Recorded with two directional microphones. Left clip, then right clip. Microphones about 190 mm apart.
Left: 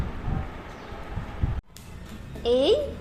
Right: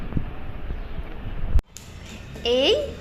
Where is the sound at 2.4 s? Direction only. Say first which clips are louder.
Right 1 dB; 10° left (ahead or behind).